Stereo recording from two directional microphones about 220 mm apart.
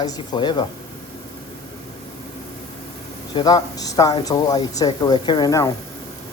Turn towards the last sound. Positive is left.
turn(degrees=15)  # may be behind; listen again after turning